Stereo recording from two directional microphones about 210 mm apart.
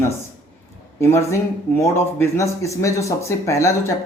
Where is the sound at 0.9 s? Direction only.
15° left (ahead or behind).